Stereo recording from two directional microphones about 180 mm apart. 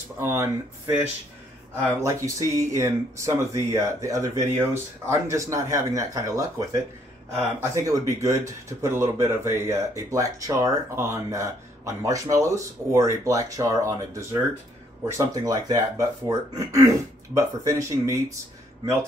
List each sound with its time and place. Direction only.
0.2 s speech: 15° right (ahead or behind)